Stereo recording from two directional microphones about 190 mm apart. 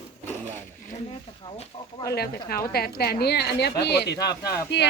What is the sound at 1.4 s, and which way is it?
Speech, 25° left (ahead or behind).